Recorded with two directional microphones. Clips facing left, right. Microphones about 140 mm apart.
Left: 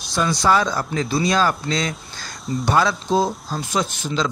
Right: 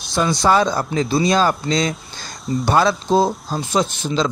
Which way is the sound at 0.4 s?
25° right (ahead or behind).